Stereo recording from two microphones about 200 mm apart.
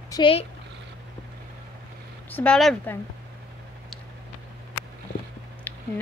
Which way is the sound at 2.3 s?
5° left (ahead or behind).